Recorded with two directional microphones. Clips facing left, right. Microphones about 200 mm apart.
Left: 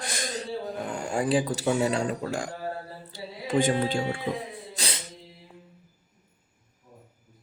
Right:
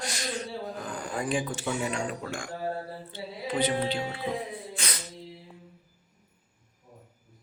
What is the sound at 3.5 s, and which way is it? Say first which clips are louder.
Speech: left 3 dB; 45° left (ahead or behind).